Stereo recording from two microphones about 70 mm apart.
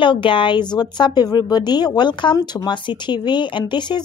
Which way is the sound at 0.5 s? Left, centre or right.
Left.